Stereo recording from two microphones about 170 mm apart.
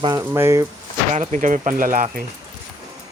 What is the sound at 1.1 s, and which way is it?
Speech, 45° right (ahead or behind).